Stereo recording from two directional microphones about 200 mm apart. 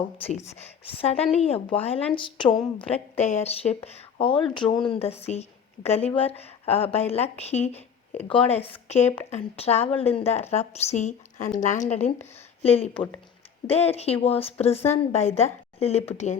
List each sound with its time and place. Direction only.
0.3 s a woman's voice: 30° left (ahead or behind)
2.6 s a woman's voice: 5° left (ahead or behind)
3.2 s a woman's voice: 35° left (ahead or behind)